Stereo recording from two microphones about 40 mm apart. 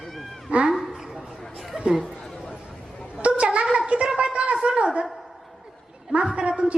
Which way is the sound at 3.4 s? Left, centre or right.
Right.